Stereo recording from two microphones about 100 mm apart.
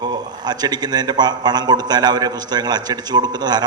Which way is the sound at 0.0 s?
45° right (ahead or behind).